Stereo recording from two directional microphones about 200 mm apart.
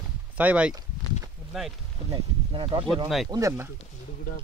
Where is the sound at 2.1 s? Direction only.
25° right (ahead or behind).